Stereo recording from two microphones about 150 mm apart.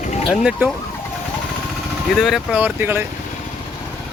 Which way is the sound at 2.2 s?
5° right (ahead or behind).